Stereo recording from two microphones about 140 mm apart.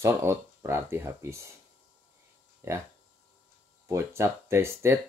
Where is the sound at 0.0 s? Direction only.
20° right (ahead or behind).